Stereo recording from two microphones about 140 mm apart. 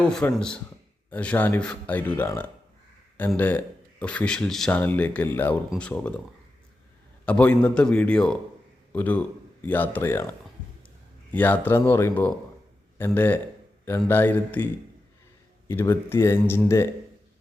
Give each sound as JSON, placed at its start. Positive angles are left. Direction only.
{"t": 0.3, "sound": "speech", "side_deg": 5}
{"t": 7.3, "sound": "a man's voice", "side_deg": 10}
{"t": 11.3, "sound": "speech", "side_deg": 10}